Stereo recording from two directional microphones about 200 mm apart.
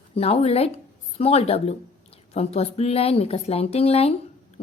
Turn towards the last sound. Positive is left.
turn(degrees=30)  # may be behind; listen again after turning